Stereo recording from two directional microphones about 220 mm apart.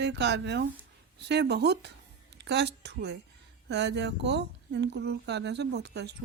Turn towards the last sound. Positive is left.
turn(degrees=-50)  # may be behind; listen again after turning